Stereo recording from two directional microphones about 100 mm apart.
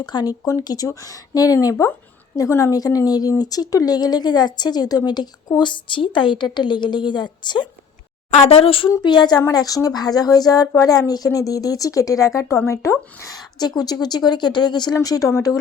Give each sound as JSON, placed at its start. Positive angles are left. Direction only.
{"t": 0.0, "sound": "speech", "side_deg": 50}
{"t": 0.4, "sound": "speech", "side_deg": 35}
{"t": 8.4, "sound": "speech", "side_deg": 85}
{"t": 9.0, "sound": "speech", "side_deg": 45}